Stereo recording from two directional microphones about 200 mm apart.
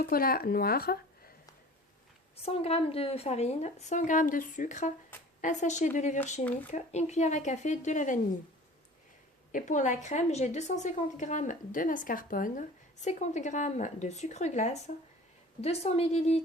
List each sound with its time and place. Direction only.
0.0 s speech: 45° left (ahead or behind)
2.3 s a woman's voice: 30° left (ahead or behind)
9.5 s a woman's voice: 40° left (ahead or behind)